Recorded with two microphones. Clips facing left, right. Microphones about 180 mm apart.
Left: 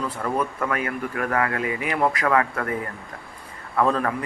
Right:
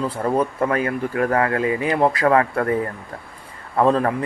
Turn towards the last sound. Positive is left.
turn(degrees=-30)  # may be behind; listen again after turning